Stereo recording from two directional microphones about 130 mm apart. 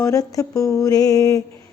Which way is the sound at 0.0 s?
25° left (ahead or behind).